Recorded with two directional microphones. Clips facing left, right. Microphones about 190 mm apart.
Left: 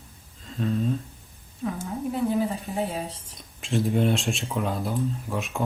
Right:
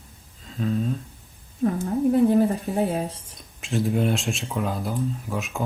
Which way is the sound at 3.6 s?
Centre (ahead or behind).